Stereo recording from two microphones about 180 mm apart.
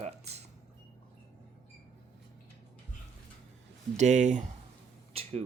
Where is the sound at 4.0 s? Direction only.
40° right (ahead or behind).